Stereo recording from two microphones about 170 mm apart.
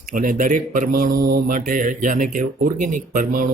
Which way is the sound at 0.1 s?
50° right (ahead or behind).